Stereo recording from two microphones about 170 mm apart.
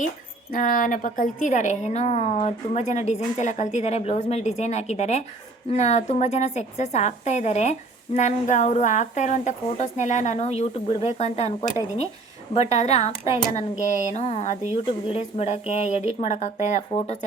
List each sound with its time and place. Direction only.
0.5 s a woman's voice: 50° left (ahead or behind)
12.5 s a woman's voice: 40° left (ahead or behind)